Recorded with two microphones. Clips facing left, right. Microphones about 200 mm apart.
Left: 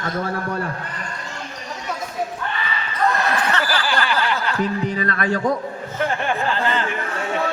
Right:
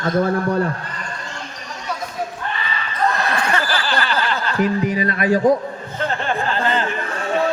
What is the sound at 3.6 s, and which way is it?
Snicker, 10° left (ahead or behind).